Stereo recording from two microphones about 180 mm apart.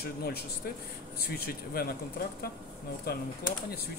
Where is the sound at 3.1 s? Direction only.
60° left (ahead or behind).